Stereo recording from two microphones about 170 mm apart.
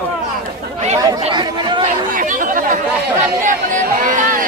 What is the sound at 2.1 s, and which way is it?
Chatter, 50° right (ahead or behind).